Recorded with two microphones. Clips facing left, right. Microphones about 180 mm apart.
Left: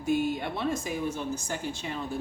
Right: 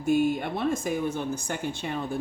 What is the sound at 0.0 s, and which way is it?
Speech, 55° right (ahead or behind).